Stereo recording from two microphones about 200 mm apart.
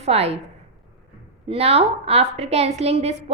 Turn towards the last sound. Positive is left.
turn(degrees=-30)  # may be behind; listen again after turning